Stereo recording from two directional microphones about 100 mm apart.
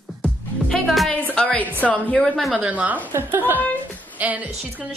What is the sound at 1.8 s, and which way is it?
Speech, 15° left (ahead or behind).